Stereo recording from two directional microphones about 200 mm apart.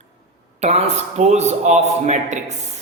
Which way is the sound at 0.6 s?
30° right (ahead or behind).